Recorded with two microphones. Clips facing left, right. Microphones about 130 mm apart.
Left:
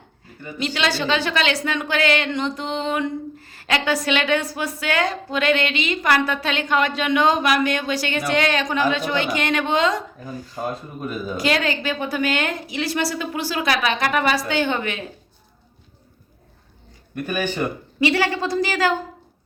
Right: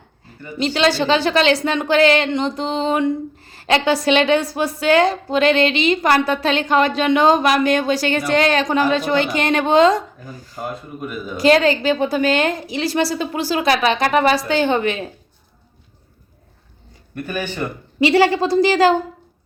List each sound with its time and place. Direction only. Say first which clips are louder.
0.6 s a woman's voice: right 6 dB; 35° right (ahead or behind)
11.4 s a woman's voice: right 9 dB; 35° right (ahead or behind)
17.2 s speech: left 1 dB; 15° left (ahead or behind)
18.0 s a woman's voice: right 6 dB; 30° right (ahead or behind)